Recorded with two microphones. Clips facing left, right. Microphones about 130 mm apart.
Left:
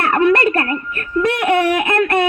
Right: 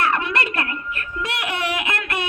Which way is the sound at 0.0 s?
50° left (ahead or behind).